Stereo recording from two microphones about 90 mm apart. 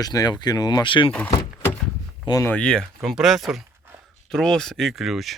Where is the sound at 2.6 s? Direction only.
10° left (ahead or behind).